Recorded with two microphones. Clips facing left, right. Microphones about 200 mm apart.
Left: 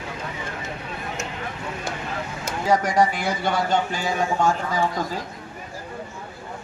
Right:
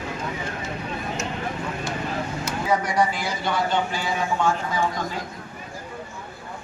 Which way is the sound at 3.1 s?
55° left (ahead or behind).